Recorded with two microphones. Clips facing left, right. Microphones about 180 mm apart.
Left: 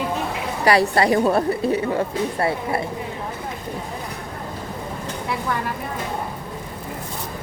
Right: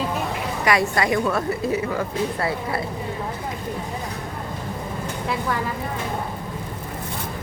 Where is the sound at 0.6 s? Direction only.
35° left (ahead or behind).